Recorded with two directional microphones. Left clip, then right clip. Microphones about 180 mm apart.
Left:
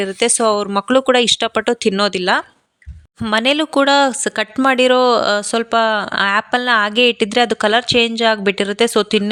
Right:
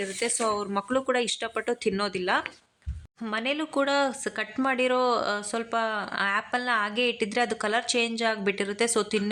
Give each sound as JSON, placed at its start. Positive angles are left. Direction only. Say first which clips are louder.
{"t": 0.0, "sound": "speech", "louder": "left 12 dB", "side_deg": 50}